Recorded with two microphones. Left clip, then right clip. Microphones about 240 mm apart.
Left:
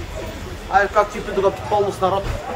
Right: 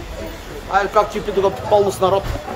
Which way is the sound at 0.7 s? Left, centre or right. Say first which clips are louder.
Even; right.